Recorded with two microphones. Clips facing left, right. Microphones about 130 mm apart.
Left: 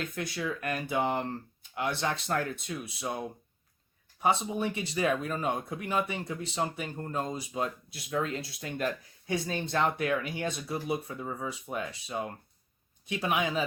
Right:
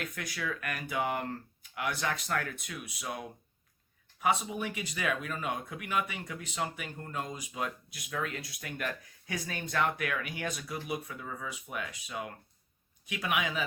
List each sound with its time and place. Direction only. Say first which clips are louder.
0.0 s speech: left 4 dB; 25° left (ahead or behind)